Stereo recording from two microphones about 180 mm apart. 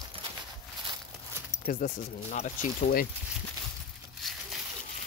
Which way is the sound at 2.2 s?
40° left (ahead or behind).